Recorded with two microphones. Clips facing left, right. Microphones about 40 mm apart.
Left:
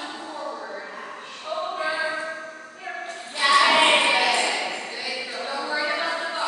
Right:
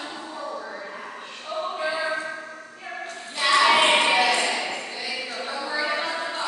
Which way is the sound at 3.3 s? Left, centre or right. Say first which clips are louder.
Left 1 dB; centre.